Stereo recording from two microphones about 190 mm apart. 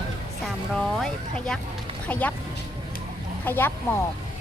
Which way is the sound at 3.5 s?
10° left (ahead or behind).